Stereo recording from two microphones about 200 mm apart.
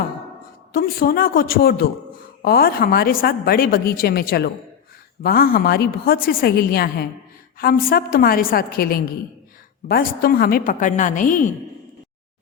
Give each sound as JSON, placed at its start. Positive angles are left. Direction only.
{"t": 0.7, "sound": "a woman's voice", "side_deg": 50}